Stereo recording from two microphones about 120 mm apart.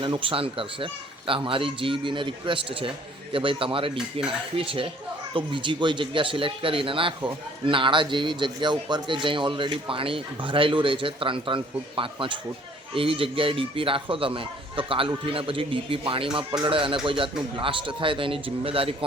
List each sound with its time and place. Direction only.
0.0 s a man's voice: 45° right (ahead or behind)